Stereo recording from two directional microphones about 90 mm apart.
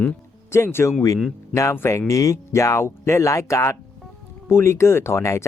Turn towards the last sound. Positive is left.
turn(degrees=30)  # may be behind; listen again after turning